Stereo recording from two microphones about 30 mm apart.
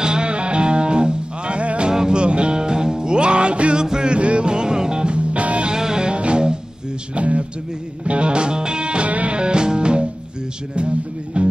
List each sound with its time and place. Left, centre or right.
0.0 s music: right
1.9 s music: right
2.2 s music: right
3.7 s music: right
4.1 s music: right
5.7 s music: right
6.0 s music: right
7.2 s a sound: right
8.0 s music: right